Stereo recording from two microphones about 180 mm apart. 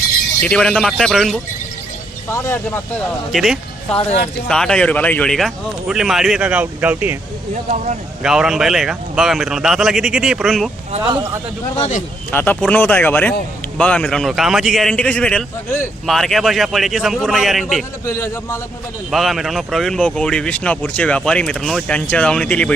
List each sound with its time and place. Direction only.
0.4 s speech: 5° left (ahead or behind)
2.3 s speech: 15° left (ahead or behind)
3.3 s speech: centre (ahead or behind)
7.5 s speech: 40° right (ahead or behind)
8.2 s speech: 5° right (ahead or behind)
11.0 s a man's voice: 20° right (ahead or behind)
11.8 s speech: 40° left (ahead or behind)
12.3 s speech: 10° left (ahead or behind)
18.0 s speech: 15° left (ahead or behind)
19.1 s speech: centre (ahead or behind)